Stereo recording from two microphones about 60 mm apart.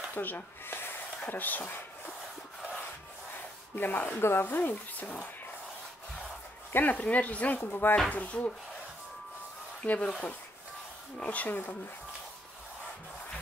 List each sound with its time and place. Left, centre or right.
0.1 s speech: left
3.7 s speech: left
6.7 s speech: left
9.8 s speech: centre
11.1 s speech: left